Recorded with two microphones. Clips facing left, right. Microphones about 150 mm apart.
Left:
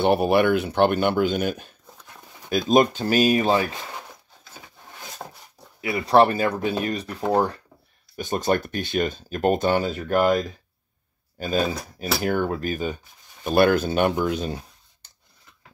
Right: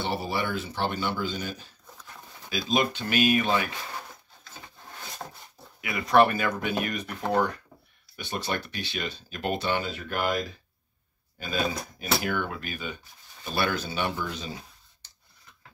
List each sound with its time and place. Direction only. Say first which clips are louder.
0.0 s speech: left 11 dB; 60° left (ahead or behind)
2.7 s speech: left 8 dB; 45° left (ahead or behind)
5.2 s wood: left 2 dB; 20° left (ahead or behind)
5.8 s speech: left 4 dB; 35° left (ahead or behind)
8.2 s speech: left 9 dB; 45° left (ahead or behind)